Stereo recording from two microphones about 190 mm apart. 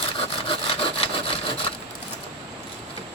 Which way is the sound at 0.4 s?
30° left (ahead or behind).